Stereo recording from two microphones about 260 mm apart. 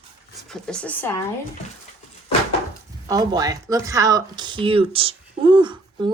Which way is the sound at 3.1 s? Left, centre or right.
Centre.